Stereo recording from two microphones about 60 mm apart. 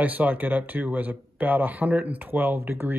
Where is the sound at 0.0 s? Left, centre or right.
Right.